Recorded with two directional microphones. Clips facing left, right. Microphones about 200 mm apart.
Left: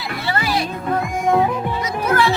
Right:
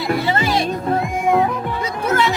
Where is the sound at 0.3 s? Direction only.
25° right (ahead or behind).